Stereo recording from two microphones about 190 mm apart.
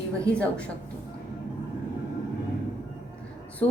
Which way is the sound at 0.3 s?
5° left (ahead or behind).